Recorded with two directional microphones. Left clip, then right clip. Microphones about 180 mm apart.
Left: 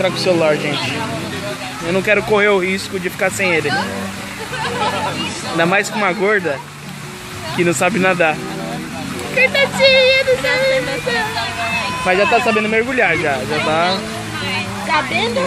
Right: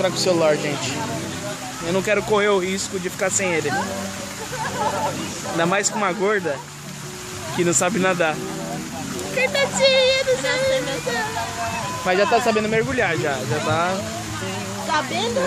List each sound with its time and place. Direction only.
0.0 s speech: 5° left (ahead or behind)
5.6 s speech: 10° left (ahead or behind)
7.5 s speech: 10° left (ahead or behind)
14.9 s speech: 25° right (ahead or behind)